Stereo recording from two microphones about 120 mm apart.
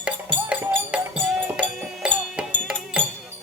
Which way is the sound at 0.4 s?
10° right (ahead or behind).